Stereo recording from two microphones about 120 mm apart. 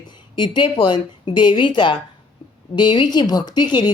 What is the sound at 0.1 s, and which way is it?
A woman's voice, 40° left (ahead or behind).